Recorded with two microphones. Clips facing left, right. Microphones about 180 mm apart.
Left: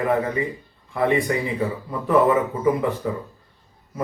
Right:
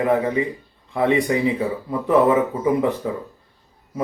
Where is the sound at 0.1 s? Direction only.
20° right (ahead or behind).